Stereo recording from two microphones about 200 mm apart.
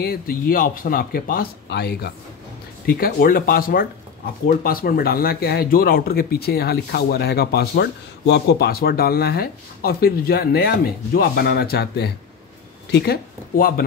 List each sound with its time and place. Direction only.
0.0 s speech: 45° left (ahead or behind)